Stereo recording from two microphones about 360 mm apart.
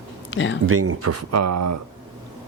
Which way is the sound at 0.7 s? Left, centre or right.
Right.